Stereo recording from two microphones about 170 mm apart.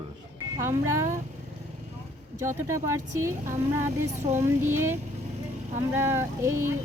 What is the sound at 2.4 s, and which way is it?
Speech, 15° right (ahead or behind).